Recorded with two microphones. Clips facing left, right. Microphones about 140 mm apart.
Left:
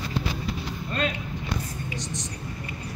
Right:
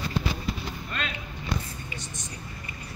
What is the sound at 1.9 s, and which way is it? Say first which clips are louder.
Vehicle: left 6 dB; 85° left.